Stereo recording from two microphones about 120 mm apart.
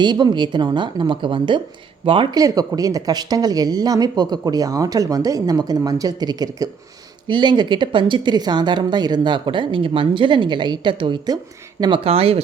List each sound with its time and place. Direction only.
0.0 s speech: 40° right (ahead or behind)
2.3 s speech: 30° right (ahead or behind)
12.0 s speech: 55° right (ahead or behind)